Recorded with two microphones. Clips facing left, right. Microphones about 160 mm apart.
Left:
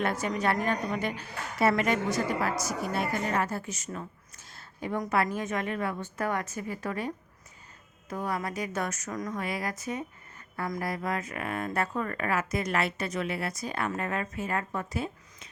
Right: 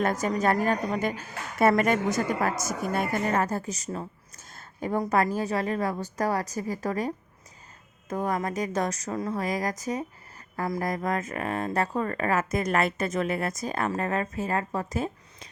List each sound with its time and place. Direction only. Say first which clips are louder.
0.0 s a woman's voice: right 4 dB; 40° right (ahead or behind)
8.1 s speech: right 4 dB; 45° right (ahead or behind)